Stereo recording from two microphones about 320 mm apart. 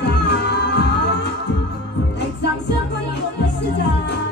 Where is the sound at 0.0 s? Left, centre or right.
Left.